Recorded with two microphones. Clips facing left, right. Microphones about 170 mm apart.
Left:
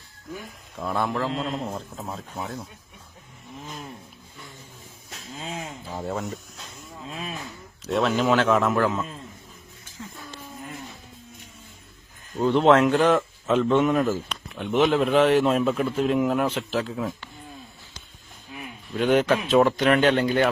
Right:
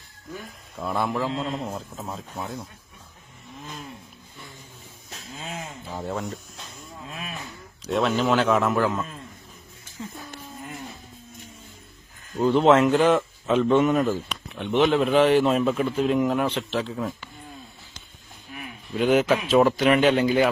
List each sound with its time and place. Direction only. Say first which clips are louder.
0.8 s speech: even; centre (ahead or behind)
5.6 s speech: left 1 dB; 5° left (ahead or behind)
7.1 s a sound: left 3 dB; 20° left (ahead or behind)
7.9 s speech: even; centre (ahead or behind)
12.4 s speech: even; centre (ahead or behind)
18.9 s speech: even; 5° right (ahead or behind)